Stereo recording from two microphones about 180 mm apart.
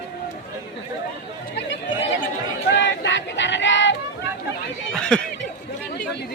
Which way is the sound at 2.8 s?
80° left.